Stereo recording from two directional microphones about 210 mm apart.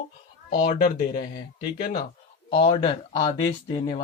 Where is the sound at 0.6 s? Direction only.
40° left (ahead or behind).